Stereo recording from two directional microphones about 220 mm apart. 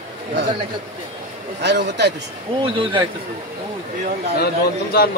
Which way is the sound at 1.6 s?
50° right (ahead or behind).